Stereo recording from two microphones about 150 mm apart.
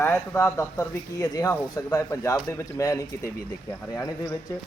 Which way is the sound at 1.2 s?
25° left (ahead or behind).